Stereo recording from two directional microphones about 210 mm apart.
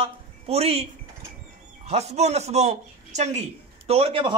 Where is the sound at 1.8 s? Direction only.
30° right (ahead or behind).